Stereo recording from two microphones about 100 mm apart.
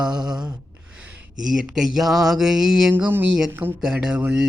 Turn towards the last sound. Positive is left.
turn(degrees=-10)  # may be behind; listen again after turning